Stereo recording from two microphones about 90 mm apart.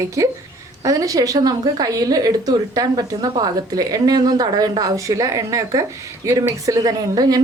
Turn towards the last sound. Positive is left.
turn(degrees=-45)  # may be behind; listen again after turning